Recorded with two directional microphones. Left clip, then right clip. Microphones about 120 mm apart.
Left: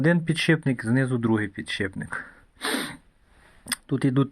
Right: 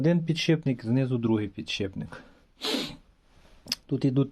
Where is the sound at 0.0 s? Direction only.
Centre (ahead or behind); by 2.9 s 15° right (ahead or behind).